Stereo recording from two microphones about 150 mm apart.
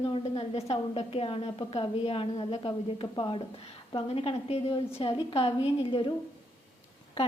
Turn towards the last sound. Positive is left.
turn(degrees=40)  # may be behind; listen again after turning